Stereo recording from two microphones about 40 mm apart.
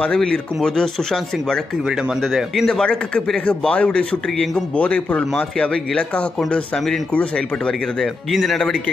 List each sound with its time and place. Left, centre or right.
2.3 s speech: centre
2.7 s speech: left
8.0 s speech: centre